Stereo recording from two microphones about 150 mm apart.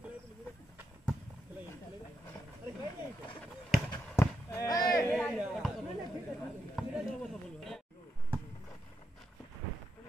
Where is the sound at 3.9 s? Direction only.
20° left (ahead or behind).